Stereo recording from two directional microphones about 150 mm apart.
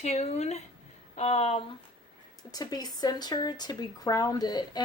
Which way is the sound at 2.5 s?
25° left (ahead or behind).